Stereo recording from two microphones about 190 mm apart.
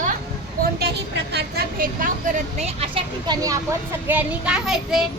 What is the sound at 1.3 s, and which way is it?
A woman's voice, 55° right (ahead or behind).